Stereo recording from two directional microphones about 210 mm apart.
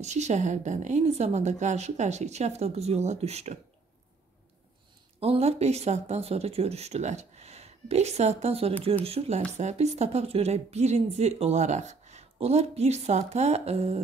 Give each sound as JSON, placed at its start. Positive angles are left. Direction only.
{"t": 0.0, "sound": "a woman's voice", "side_deg": -30}
{"t": 5.2, "sound": "a woman's voice", "side_deg": -30}